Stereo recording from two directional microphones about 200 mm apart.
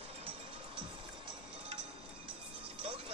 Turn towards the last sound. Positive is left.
turn(degrees=-25)  # may be behind; listen again after turning